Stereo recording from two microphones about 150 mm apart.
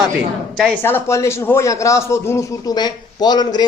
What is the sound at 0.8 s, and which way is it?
Speech, 15° left (ahead or behind).